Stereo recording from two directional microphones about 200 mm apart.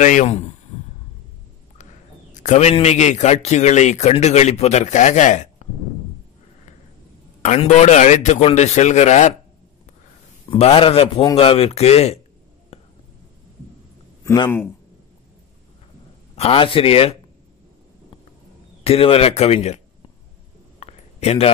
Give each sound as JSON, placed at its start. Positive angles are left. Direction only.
{"t": 0.0, "sound": "a man's voice", "side_deg": 40}
{"t": 2.3, "sound": "a man's voice", "side_deg": 40}
{"t": 7.4, "sound": "a man's voice", "side_deg": 35}
{"t": 10.5, "sound": "a man's voice", "side_deg": 25}
{"t": 14.2, "sound": "speech", "side_deg": 20}
{"t": 16.3, "sound": "speech", "side_deg": 30}
{"t": 18.9, "sound": "a man's voice", "side_deg": 30}
{"t": 20.8, "sound": "a sound", "side_deg": 30}